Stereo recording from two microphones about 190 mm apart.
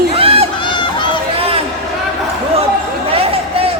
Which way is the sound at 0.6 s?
25° left (ahead or behind).